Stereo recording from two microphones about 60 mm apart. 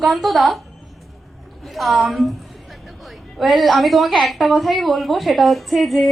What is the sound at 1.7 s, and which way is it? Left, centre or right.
A woman's voice, centre.